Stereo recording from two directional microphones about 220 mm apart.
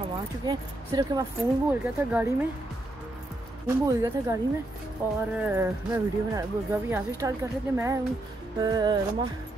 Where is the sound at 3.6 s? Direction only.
10° right (ahead or behind).